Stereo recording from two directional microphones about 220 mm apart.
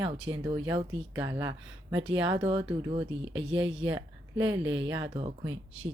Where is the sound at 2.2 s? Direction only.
25° right (ahead or behind).